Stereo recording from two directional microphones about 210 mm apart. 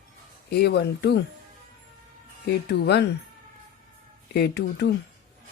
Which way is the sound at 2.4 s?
50° left (ahead or behind).